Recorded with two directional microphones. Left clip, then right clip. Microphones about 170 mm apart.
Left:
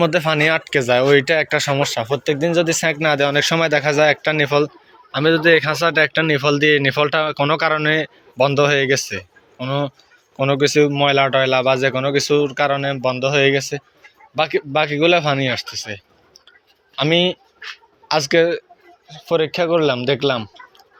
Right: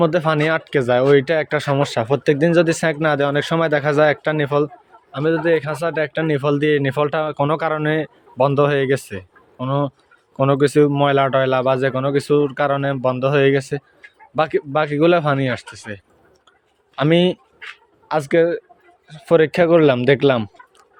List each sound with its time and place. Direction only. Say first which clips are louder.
0.0 s speech: left 1 dB; 20° right (ahead or behind)
1.9 s speech: right 2 dB; 40° right (ahead or behind); by 4.7 s 15° right (ahead or behind)
5.1 s speech: left 4 dB; 5° right (ahead or behind)
6.2 s speech: left 2 dB; 20° right (ahead or behind); by 13.8 s 35° right (ahead or behind)
14.5 s a man's voice: left 1 dB; 25° right (ahead or behind)
18.1 s speech: left 1 dB; 20° right (ahead or behind)
19.3 s speech: right 4 dB; 50° right (ahead or behind)